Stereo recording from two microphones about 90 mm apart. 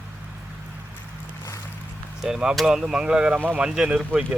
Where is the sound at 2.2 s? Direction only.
5° right (ahead or behind).